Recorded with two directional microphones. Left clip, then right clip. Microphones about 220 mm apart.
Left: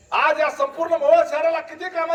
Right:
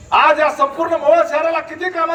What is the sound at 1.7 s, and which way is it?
Speech, 50° left (ahead or behind).